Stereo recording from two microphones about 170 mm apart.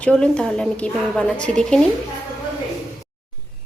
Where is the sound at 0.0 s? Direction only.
5° left (ahead or behind).